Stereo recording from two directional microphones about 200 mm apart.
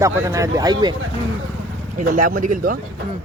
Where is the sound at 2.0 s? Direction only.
45° right (ahead or behind).